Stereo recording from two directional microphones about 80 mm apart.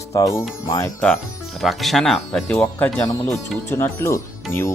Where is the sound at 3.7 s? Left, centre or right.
Left.